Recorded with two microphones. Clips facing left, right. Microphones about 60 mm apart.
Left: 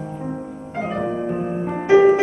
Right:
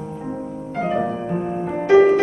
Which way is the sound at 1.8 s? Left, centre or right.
Centre.